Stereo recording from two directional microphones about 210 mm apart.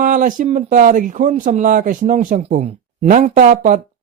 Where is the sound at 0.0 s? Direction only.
40° right (ahead or behind).